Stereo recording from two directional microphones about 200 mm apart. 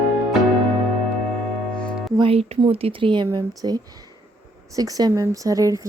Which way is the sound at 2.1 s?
30° right (ahead or behind).